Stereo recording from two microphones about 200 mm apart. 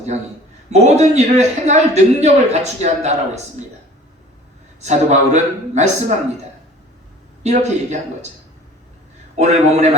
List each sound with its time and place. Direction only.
0.7 s a man's voice: 35° right (ahead or behind)
4.8 s a man's voice: 35° right (ahead or behind)
7.4 s a man's voice: 35° right (ahead or behind)
9.3 s a man's voice: 35° right (ahead or behind)